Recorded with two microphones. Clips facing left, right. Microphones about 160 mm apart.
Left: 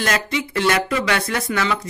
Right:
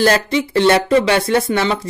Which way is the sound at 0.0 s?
30° right (ahead or behind).